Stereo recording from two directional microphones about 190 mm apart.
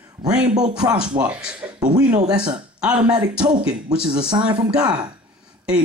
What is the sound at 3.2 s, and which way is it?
Speech, 20° right (ahead or behind).